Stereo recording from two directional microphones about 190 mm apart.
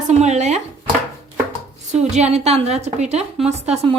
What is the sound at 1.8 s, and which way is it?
A woman's voice, 35° right (ahead or behind).